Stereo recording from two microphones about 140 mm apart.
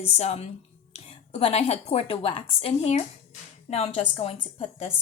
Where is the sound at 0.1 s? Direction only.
50° left (ahead or behind).